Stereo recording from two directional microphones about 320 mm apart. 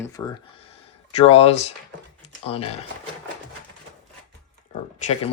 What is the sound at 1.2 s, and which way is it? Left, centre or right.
Speech, centre.